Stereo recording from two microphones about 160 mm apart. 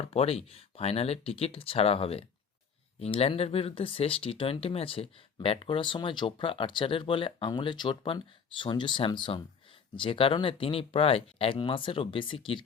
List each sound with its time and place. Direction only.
0.1 s speech: 40° left (ahead or behind)